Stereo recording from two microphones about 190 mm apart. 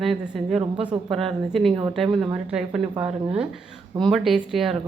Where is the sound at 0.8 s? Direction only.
30° right (ahead or behind).